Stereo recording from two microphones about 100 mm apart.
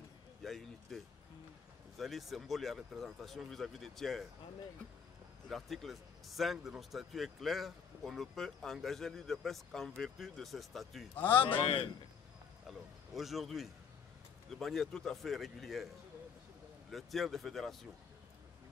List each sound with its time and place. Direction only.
0.4 s a sound: centre (ahead or behind)
2.0 s speech: centre (ahead or behind)
5.5 s speech: centre (ahead or behind)
11.1 s speech: 20° left (ahead or behind)
12.6 s speech: centre (ahead or behind)
16.9 s speech: centre (ahead or behind)